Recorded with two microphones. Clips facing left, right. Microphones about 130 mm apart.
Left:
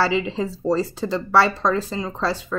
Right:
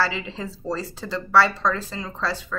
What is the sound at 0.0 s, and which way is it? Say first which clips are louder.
Speech: left 5 dB; 20° left (ahead or behind).